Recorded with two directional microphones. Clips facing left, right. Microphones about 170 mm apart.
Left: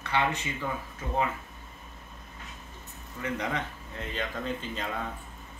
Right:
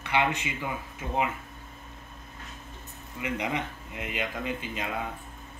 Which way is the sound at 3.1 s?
15° right (ahead or behind).